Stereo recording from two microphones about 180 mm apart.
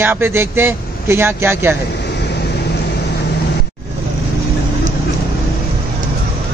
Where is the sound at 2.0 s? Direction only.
70° left (ahead or behind).